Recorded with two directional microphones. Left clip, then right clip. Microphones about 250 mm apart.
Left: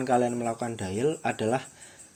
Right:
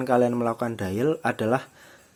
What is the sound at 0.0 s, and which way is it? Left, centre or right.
A man's voice, right.